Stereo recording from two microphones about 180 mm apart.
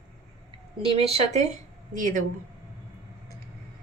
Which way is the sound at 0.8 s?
30° right (ahead or behind).